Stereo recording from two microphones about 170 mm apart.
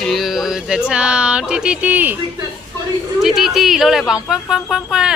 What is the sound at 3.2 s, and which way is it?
Speech, centre (ahead or behind).